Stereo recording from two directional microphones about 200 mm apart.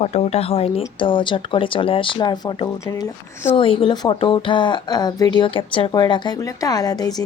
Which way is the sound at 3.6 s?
25° left (ahead or behind).